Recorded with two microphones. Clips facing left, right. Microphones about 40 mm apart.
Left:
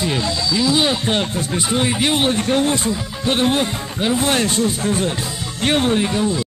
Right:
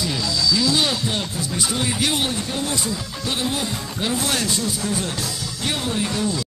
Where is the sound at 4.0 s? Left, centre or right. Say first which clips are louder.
Left 5 dB; left.